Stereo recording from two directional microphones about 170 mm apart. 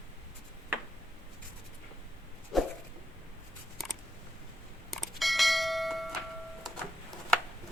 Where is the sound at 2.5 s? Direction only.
Centre (ahead or behind).